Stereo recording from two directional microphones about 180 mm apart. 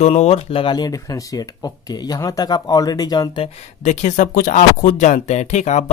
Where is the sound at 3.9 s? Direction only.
40° left (ahead or behind).